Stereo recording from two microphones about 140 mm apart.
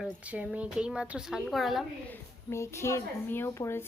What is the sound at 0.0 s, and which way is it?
Speech, 10° right (ahead or behind).